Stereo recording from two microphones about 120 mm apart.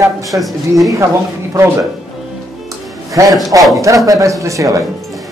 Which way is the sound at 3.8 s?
30° right (ahead or behind).